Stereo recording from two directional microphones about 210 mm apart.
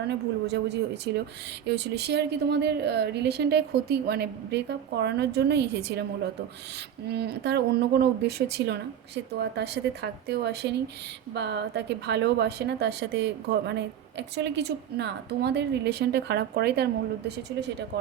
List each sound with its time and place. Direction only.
0.1 s a woman's voice: 55° right (ahead or behind)